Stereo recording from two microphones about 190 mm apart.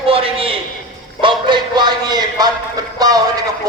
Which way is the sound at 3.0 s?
20° right (ahead or behind).